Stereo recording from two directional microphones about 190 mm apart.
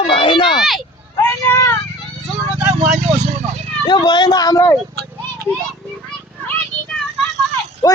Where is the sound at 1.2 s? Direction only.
15° left (ahead or behind).